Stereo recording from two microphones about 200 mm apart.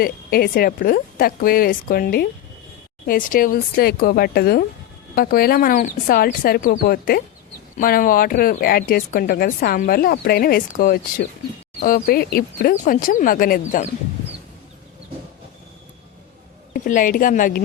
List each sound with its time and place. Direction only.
0.0 s speech: 50° left (ahead or behind)
16.7 s speech: 45° left (ahead or behind)